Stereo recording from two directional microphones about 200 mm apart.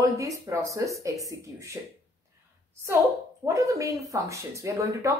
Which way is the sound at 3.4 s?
15° right (ahead or behind).